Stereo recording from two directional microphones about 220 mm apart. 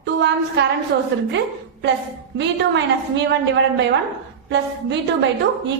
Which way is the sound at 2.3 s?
55° right (ahead or behind).